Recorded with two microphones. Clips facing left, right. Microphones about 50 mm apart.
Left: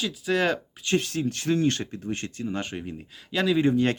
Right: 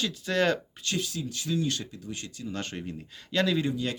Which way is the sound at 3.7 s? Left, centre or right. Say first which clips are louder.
Left 8 dB; left.